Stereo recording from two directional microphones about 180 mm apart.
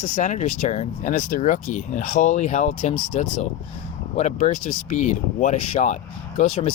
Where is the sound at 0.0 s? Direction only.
45° left (ahead or behind).